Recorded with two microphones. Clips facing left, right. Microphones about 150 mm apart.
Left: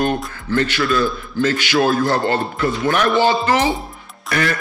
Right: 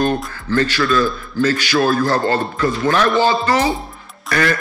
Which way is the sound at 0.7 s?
20° left (ahead or behind).